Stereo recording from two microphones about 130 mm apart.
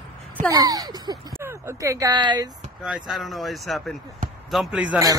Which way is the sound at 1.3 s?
20° right (ahead or behind).